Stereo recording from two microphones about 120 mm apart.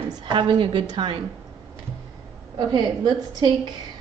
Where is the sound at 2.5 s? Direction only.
40° right (ahead or behind).